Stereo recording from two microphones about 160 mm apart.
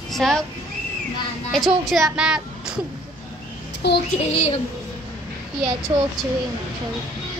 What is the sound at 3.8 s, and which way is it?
Speech, 90° left.